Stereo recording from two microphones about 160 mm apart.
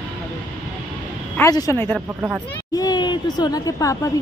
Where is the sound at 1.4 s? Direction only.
20° left (ahead or behind).